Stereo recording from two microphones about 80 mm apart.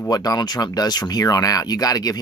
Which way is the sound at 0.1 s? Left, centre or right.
Left.